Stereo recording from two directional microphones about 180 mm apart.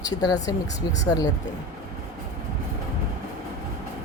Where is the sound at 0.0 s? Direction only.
20° left (ahead or behind).